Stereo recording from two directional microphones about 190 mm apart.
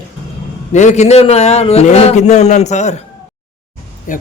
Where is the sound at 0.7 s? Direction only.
40° left (ahead or behind).